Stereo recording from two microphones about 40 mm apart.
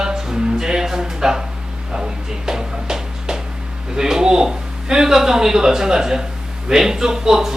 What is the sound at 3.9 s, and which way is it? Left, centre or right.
Speech, centre.